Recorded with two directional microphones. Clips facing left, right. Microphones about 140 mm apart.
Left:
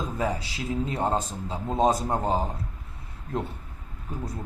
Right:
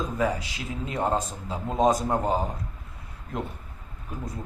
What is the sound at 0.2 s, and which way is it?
A man's voice, 30° left (ahead or behind).